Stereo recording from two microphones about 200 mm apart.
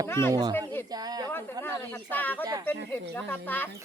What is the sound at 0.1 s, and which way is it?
Speech, 10° left (ahead or behind).